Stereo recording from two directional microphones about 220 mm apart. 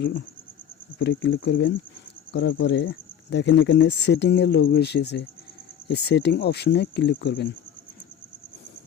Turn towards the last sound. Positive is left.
turn(degrees=50)  # may be behind; listen again after turning